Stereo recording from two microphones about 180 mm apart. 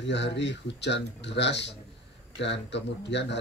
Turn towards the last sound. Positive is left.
turn(degrees=75)  # may be behind; listen again after turning